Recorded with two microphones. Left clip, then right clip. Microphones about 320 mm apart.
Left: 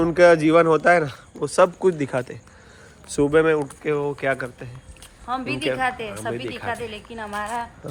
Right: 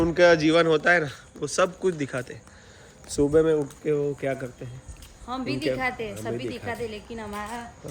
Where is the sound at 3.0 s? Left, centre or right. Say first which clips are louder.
Left 3 dB; left.